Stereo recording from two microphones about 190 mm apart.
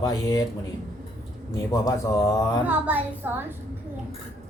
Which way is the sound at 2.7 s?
10° right (ahead or behind).